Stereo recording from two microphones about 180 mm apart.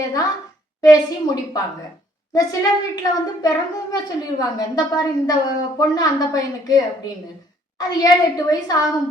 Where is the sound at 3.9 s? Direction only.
20° left (ahead or behind).